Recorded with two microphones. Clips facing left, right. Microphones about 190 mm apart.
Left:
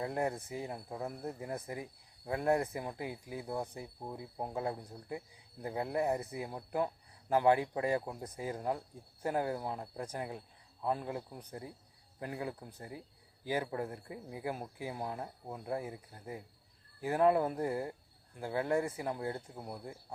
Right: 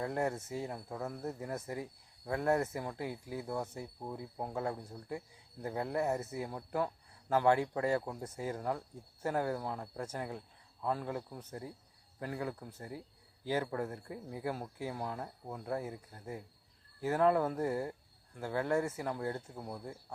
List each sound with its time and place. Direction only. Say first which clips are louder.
0.0 s speech: even; 20° left (ahead or behind)